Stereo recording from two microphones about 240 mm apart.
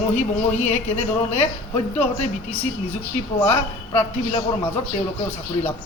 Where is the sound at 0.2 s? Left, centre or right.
Left.